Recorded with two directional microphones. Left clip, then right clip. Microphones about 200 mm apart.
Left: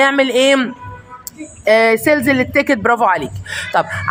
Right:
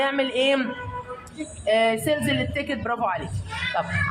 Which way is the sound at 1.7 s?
50° left (ahead or behind).